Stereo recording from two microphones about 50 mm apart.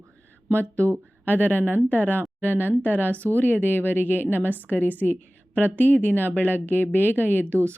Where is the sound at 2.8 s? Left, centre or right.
Left.